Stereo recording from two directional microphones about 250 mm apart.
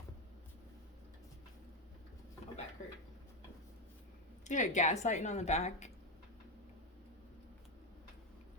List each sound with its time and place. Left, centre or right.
4.4 s a woman's voice: left